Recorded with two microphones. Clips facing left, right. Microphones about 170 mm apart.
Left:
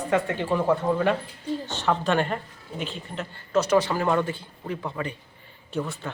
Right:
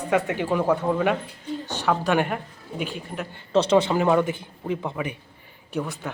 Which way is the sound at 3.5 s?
25° right (ahead or behind).